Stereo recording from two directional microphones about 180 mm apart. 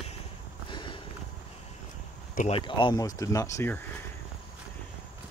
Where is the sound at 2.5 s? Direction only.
25° left (ahead or behind).